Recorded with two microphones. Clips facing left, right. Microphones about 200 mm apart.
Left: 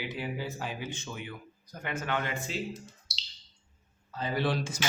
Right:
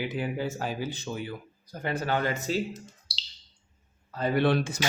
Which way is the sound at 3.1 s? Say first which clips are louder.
Right 2 dB; 30° right (ahead or behind).